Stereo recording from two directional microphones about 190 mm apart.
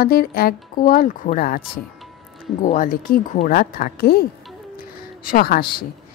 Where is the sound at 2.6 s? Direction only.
45° left (ahead or behind).